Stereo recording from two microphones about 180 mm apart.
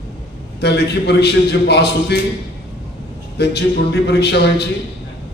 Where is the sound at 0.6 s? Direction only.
65° left (ahead or behind).